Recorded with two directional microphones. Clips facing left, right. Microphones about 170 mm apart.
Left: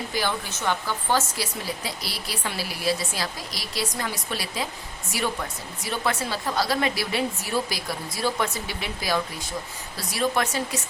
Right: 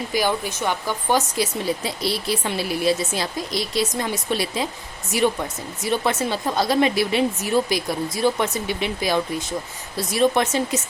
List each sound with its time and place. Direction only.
0.1 s speech: 15° right (ahead or behind)